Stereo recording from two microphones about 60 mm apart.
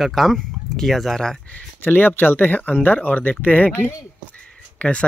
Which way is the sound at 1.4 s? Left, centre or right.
Left.